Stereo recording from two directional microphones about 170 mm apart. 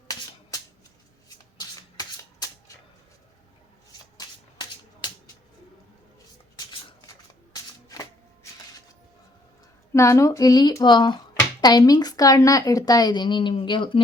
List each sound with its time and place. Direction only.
1.5 s shuffling cards: 20° left (ahead or behind)
7.5 s shuffling cards: 20° left (ahead or behind)
9.9 s a woman's voice: 15° left (ahead or behind)